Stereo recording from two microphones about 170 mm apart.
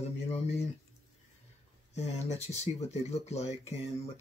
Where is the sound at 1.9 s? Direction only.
40° left (ahead or behind).